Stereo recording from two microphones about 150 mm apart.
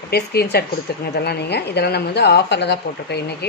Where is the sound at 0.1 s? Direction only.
90° left.